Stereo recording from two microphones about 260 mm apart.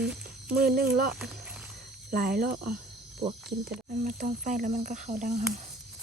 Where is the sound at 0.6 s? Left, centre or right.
Right.